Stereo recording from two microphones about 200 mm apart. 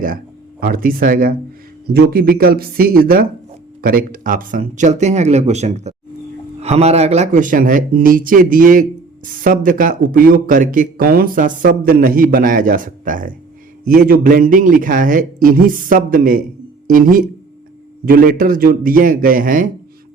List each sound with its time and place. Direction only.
0.6 s speech: 45° right (ahead or behind)